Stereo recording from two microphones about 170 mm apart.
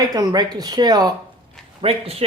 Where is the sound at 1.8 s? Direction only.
35° right (ahead or behind).